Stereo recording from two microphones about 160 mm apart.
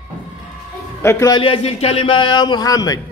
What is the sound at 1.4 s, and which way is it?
A man's voice, 35° left (ahead or behind).